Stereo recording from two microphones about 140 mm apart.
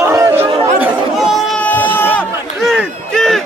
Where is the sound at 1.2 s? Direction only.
Centre (ahead or behind).